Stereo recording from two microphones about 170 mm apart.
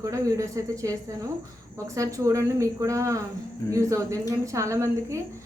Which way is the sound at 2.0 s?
20° right (ahead or behind).